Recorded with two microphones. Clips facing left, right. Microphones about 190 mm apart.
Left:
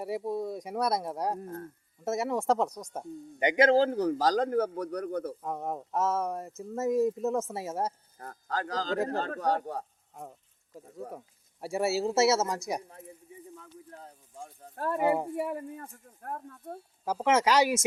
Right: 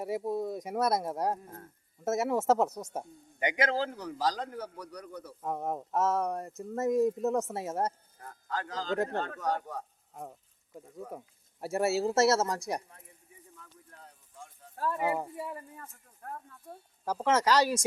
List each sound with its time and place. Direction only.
0.0 s speech: centre (ahead or behind)
3.4 s a man's voice: 30° left (ahead or behind); by 5.3 s 55° left (ahead or behind)
5.4 s speech: centre (ahead or behind)
8.2 s speech: 40° left (ahead or behind)
10.2 s speech: centre (ahead or behind)
13.6 s a sound: 35° left (ahead or behind)
14.8 s speech: 55° left (ahead or behind)
17.1 s speech: 10° left (ahead or behind)